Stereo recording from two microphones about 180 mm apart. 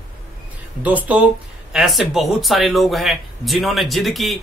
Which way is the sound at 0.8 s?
10° right (ahead or behind).